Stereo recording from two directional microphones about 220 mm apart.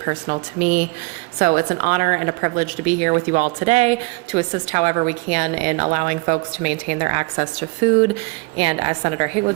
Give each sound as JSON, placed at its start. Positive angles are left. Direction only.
{"t": 0.0, "sound": "a woman's voice", "side_deg": -35}